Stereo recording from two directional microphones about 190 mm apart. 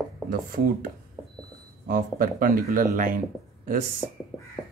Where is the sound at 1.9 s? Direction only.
45° right (ahead or behind).